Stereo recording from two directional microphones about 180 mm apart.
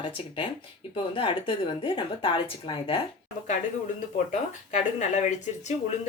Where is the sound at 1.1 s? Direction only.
30° left (ahead or behind).